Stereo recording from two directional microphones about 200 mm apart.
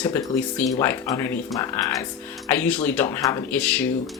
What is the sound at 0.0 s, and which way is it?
Speech, 10° left (ahead or behind).